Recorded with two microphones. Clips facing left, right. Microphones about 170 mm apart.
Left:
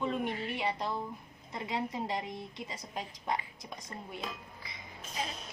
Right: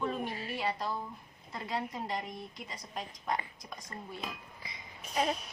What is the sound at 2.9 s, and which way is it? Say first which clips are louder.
Speech: even; 25° left (ahead or behind).